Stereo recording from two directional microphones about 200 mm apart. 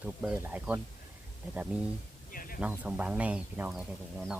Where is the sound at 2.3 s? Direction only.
45° left (ahead or behind).